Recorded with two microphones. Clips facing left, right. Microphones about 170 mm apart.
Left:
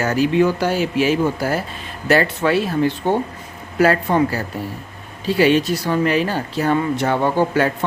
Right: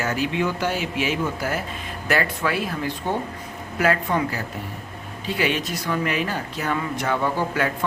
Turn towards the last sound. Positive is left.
turn(degrees=30)  # may be behind; listen again after turning